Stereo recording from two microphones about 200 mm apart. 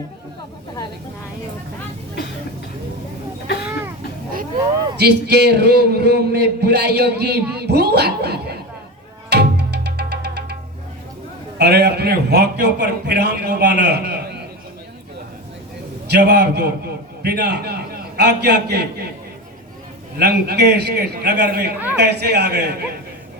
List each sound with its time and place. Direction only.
3.5 s a sound: 55° left (ahead or behind)
4.9 s a man's voice: 55° right (ahead or behind)
9.3 s music: 55° right (ahead or behind)
11.5 s a man's voice: 55° right (ahead or behind)
16.0 s a man's voice: 55° right (ahead or behind)
20.1 s a man's voice: 55° right (ahead or behind)